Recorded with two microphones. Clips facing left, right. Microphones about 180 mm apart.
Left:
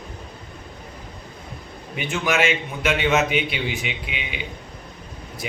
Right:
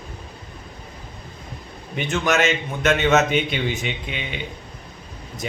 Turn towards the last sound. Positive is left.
turn(degrees=5)  # may be behind; listen again after turning